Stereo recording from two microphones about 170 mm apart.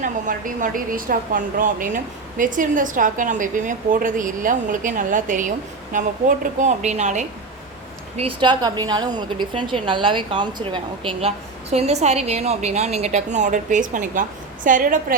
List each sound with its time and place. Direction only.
0.0 s a woman's voice: 50° right (ahead or behind)
8.1 s a woman's voice: 30° right (ahead or behind); by 15.0 s 50° right (ahead or behind)